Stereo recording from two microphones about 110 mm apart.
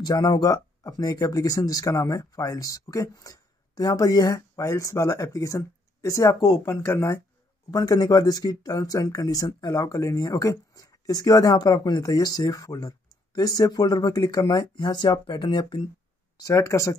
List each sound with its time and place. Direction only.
0.0 s speech: 35° left (ahead or behind)
16.4 s speech: 30° left (ahead or behind)